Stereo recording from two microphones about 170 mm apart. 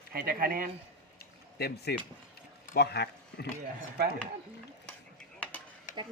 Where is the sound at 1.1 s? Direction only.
70° left (ahead or behind).